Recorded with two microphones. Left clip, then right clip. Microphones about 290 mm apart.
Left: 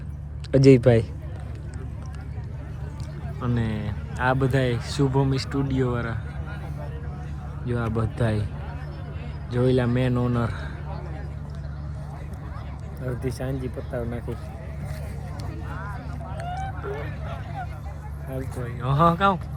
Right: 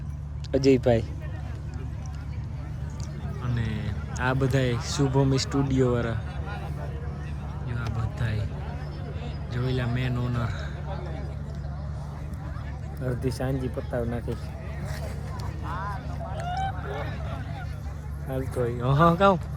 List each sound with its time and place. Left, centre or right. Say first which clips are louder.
0.5 s speech: left 5 dB; left
3.4 s speech: left 6 dB; centre
7.7 s speech: left 10 dB; centre
9.5 s speech: left 9 dB; centre
13.1 s speech: right 1 dB; centre
16.4 s boat: right 2 dB; right
18.3 s speech: right 6 dB; centre